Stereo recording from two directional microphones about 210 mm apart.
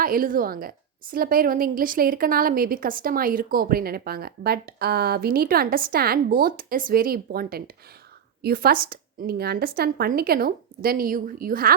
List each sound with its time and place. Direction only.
0.0 s a woman's voice: 40° right (ahead or behind)